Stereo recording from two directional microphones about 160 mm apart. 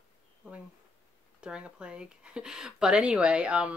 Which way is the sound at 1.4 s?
5° right (ahead or behind).